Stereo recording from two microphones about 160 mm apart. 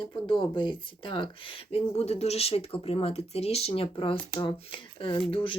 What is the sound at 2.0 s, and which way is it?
Speech, 40° left (ahead or behind).